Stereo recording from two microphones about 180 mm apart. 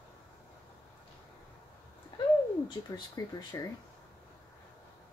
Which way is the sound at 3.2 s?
20° left (ahead or behind).